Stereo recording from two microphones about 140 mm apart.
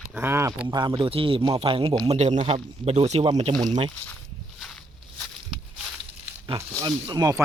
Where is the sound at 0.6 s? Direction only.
30° right (ahead or behind).